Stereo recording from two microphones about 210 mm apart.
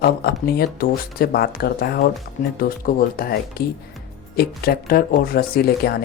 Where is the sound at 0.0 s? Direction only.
50° left (ahead or behind).